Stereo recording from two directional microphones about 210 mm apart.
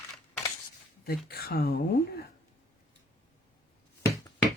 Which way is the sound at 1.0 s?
45° left (ahead or behind).